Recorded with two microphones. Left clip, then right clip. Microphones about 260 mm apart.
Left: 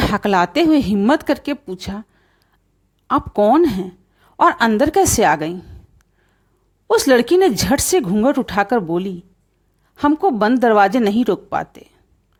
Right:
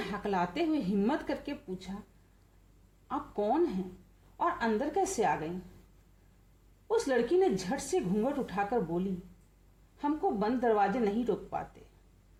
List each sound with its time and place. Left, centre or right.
0.0 s speech: left
3.1 s speech: left
6.8 s speech: left